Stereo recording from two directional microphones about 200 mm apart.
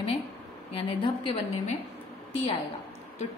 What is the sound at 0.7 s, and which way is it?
Speech, 30° left (ahead or behind).